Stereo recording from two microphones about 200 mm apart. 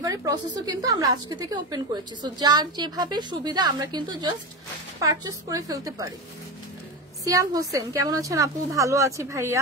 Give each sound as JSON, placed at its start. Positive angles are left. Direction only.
{"t": 0.0, "sound": "a woman's voice", "side_deg": -20}
{"t": 7.2, "sound": "a woman's voice", "side_deg": -15}